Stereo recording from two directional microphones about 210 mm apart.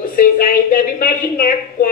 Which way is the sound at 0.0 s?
40° left (ahead or behind).